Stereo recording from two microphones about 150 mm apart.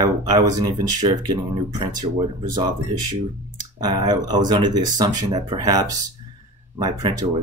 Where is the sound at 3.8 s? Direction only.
25° right (ahead or behind).